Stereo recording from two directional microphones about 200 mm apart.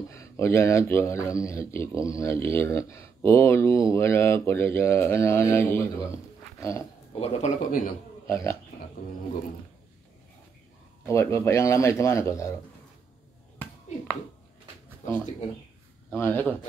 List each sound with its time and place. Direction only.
0.1 s speech: 15° left (ahead or behind)
6.1 s a sound: 15° left (ahead or behind)
7.2 s speech: 35° left (ahead or behind)
8.3 s speech: 15° left (ahead or behind)
11.1 s speech: 15° left (ahead or behind)
16.1 s speech: 10° left (ahead or behind)